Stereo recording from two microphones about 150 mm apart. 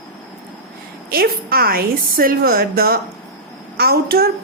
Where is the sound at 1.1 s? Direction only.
85° right.